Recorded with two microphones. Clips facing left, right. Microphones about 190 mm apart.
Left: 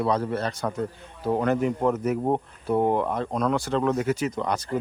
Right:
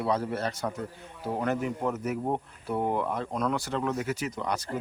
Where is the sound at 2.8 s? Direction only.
25° left (ahead or behind).